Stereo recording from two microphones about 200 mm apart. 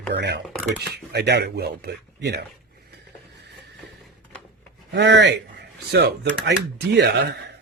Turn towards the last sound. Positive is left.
turn(degrees=-60)  # may be behind; listen again after turning